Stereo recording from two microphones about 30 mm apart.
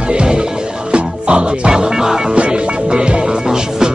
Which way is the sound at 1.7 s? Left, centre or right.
Centre.